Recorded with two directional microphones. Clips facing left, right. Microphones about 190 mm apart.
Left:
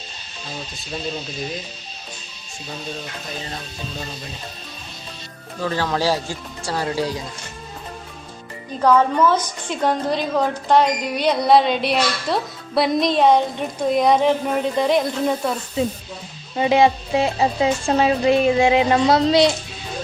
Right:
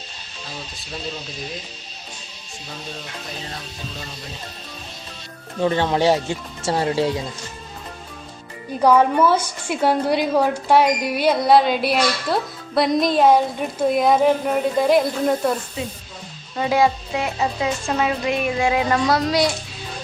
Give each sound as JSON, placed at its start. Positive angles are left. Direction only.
{"t": 5.5, "sound": "speech", "side_deg": -25}
{"t": 8.8, "sound": "a woman's voice", "side_deg": -10}
{"t": 15.8, "sound": "a sound", "side_deg": 30}
{"t": 16.6, "sound": "speech", "side_deg": 20}